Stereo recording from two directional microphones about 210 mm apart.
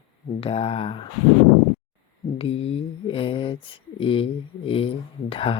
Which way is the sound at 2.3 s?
25° left (ahead or behind).